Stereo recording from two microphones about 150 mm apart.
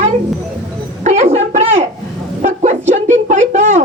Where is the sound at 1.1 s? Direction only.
50° right (ahead or behind).